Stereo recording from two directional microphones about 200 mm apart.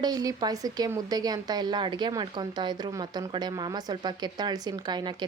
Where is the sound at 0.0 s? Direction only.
20° right (ahead or behind).